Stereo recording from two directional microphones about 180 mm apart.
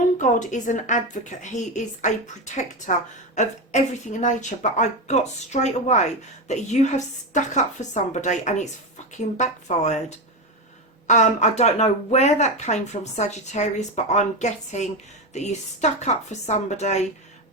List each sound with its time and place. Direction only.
0.2 s a woman's voice: 45° left (ahead or behind)